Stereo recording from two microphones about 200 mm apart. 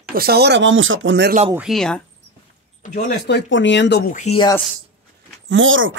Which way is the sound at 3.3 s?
65° left (ahead or behind).